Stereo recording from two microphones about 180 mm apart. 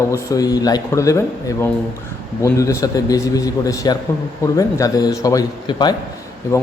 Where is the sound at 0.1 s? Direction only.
20° left (ahead or behind).